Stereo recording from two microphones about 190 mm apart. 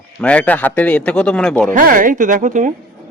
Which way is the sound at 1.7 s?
45° right (ahead or behind).